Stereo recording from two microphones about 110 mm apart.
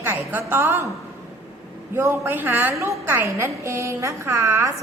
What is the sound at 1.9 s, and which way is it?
A woman's voice, 20° right (ahead or behind).